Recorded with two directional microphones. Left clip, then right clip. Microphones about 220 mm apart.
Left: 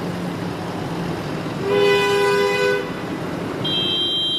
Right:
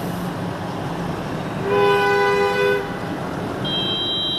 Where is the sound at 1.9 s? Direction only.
30° left (ahead or behind).